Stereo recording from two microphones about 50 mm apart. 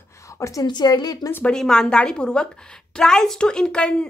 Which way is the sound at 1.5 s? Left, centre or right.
Centre.